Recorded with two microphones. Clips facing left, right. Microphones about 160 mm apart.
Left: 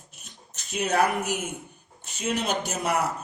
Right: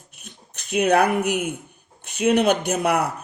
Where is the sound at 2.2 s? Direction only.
60° right (ahead or behind).